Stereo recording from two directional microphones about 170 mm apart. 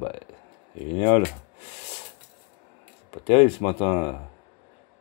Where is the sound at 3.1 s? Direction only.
35° left (ahead or behind).